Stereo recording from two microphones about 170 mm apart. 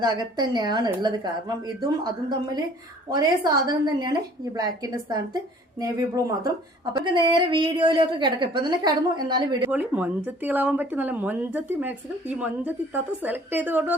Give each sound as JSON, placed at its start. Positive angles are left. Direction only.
{"t": 0.0, "sound": "a woman's voice", "side_deg": -25}
{"t": 9.7, "sound": "speech", "side_deg": -10}